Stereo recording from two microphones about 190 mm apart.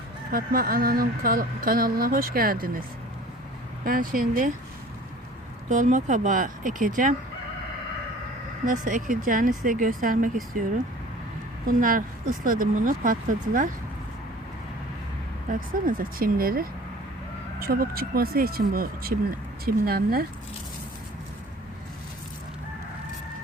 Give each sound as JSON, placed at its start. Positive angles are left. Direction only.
{"t": 0.3, "sound": "speech", "side_deg": -50}
{"t": 3.8, "sound": "speech", "side_deg": -50}
{"t": 5.6, "sound": "speech", "side_deg": -40}
{"t": 8.6, "sound": "speech", "side_deg": -45}
{"t": 11.6, "sound": "speech", "side_deg": -45}
{"t": 15.5, "sound": "speech", "side_deg": -45}